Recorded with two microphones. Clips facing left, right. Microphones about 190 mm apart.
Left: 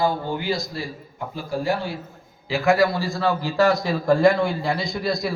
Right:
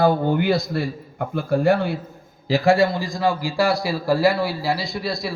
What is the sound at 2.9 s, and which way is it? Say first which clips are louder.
A man's voice: right 1 dB; 15° right (ahead or behind).